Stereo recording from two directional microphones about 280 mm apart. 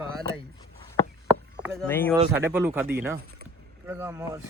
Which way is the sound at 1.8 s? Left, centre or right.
Centre.